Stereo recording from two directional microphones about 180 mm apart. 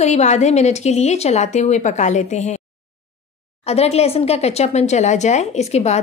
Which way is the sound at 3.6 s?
35° left (ahead or behind).